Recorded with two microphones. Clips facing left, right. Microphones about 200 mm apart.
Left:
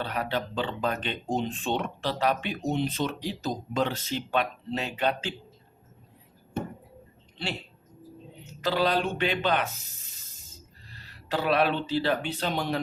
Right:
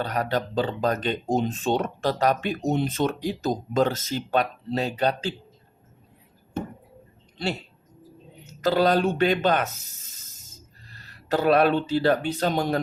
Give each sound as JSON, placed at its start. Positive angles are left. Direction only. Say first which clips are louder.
{"t": 0.0, "sound": "speech", "louder": "right 4 dB", "side_deg": -45}
{"t": 8.4, "sound": "speech", "louder": "right 5 dB", "side_deg": -45}